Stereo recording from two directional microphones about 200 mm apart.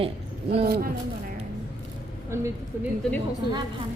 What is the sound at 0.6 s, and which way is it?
Speech, 50° right (ahead or behind).